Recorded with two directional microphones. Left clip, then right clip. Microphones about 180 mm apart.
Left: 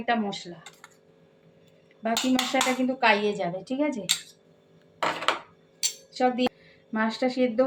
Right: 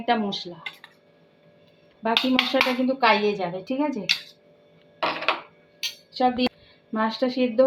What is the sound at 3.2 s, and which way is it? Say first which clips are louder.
Speech: right 3 dB; 25° right (ahead or behind).